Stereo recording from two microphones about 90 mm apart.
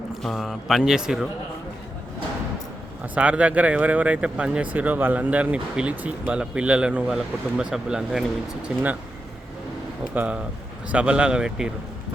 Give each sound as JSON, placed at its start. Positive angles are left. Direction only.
{"t": 0.1, "sound": "speech", "side_deg": 0}
{"t": 3.2, "sound": "speech", "side_deg": -15}
{"t": 8.6, "sound": "speech", "side_deg": -20}
{"t": 10.2, "sound": "speech", "side_deg": -15}